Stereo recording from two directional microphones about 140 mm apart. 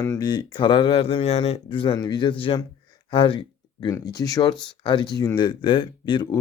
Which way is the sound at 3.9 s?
25° left (ahead or behind).